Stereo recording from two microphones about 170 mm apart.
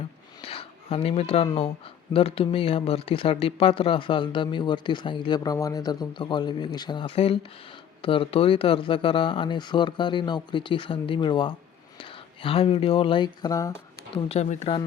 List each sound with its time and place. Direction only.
0.4 s speech: 35° left (ahead or behind)
14.2 s speech: 40° left (ahead or behind)